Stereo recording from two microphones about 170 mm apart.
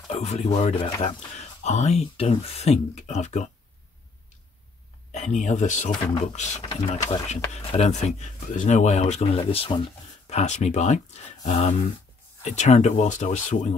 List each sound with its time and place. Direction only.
0.1 s speech: 40° left (ahead or behind)
5.1 s speech: 45° left (ahead or behind)
6.6 s speech: 30° left (ahead or behind)